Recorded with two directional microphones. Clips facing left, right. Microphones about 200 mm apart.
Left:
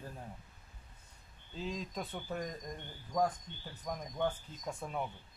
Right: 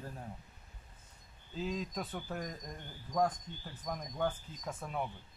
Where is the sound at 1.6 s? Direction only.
Centre (ahead or behind).